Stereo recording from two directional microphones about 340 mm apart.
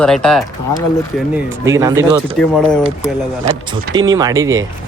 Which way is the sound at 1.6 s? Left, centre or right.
Centre.